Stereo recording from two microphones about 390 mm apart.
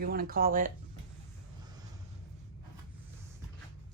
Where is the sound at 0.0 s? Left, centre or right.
Right.